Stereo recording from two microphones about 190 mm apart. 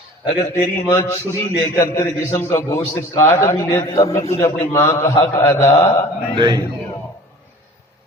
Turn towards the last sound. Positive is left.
turn(degrees=-20)  # may be behind; listen again after turning